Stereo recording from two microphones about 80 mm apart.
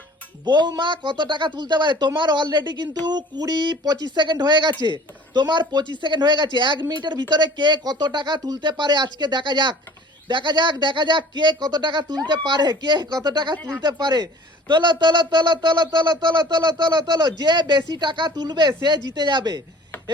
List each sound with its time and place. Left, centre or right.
0.4 s speech: right
18.3 s speech: right